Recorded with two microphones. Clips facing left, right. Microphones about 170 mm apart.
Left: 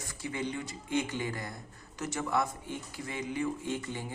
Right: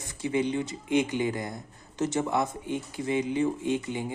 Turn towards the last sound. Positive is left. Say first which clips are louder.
# right 7 dB
turn(degrees=-20)  # may be behind; listen again after turning